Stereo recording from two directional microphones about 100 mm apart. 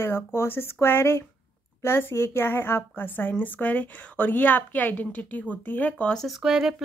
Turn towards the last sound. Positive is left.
turn(degrees=-5)  # may be behind; listen again after turning